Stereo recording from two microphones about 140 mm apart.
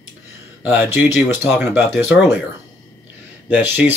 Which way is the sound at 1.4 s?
15° right (ahead or behind).